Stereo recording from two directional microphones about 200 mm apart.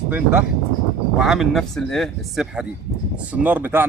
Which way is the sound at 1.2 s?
Centre (ahead or behind).